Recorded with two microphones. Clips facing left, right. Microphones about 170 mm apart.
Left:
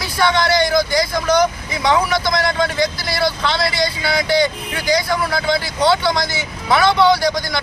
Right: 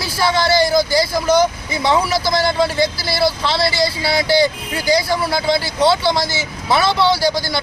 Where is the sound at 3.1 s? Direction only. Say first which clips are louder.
Right 2 dB; 5° right (ahead or behind).